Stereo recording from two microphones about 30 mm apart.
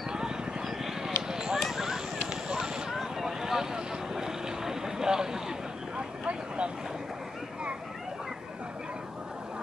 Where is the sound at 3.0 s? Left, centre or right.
Centre.